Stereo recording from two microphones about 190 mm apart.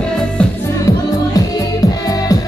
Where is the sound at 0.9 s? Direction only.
20° left (ahead or behind).